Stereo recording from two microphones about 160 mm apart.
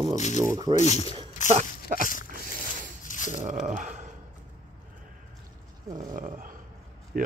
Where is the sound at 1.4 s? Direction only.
50° right (ahead or behind).